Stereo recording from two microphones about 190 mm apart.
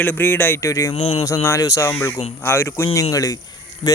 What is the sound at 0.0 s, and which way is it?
Speech, 10° left (ahead or behind).